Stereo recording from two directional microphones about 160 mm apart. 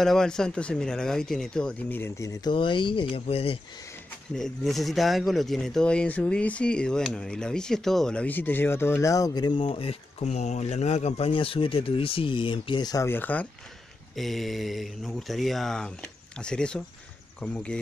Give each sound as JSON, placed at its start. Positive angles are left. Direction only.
{"t": 0.0, "sound": "speech", "side_deg": 5}
{"t": 2.5, "sound": "speech", "side_deg": 30}
{"t": 4.4, "sound": "speech", "side_deg": 0}